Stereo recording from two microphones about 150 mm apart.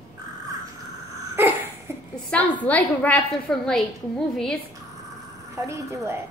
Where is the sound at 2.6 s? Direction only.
10° left (ahead or behind).